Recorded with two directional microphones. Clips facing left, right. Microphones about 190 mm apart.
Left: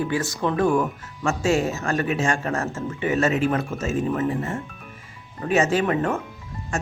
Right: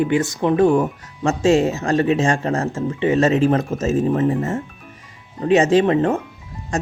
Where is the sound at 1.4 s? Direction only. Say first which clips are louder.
Right 7 dB; 35° right (ahead or behind).